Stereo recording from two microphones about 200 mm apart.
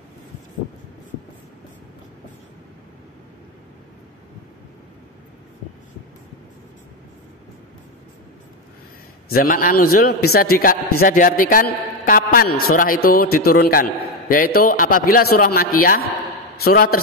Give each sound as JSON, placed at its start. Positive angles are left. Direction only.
{"t": 9.3, "sound": "a man's voice", "side_deg": 45}